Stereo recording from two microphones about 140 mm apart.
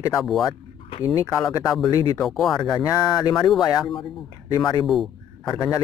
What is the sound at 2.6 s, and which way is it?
Speech, 30° left (ahead or behind).